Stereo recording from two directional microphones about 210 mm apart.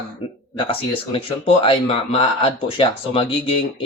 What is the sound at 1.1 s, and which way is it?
Speech, 25° left (ahead or behind).